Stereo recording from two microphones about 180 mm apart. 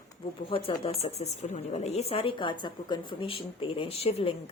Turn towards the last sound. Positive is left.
turn(degrees=30)  # may be behind; listen again after turning